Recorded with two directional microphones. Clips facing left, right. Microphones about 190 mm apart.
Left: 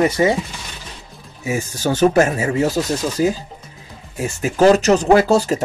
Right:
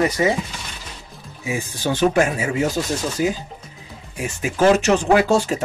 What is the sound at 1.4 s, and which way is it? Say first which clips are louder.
Speech: left 3 dB; 45° left (ahead or behind).